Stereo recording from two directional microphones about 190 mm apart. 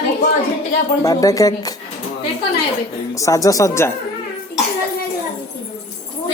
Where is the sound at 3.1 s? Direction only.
15° left (ahead or behind).